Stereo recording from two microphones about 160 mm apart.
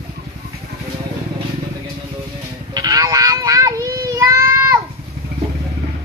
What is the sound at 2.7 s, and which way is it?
Child singing, 25° right (ahead or behind).